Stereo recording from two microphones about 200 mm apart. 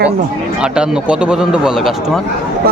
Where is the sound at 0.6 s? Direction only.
5° right (ahead or behind).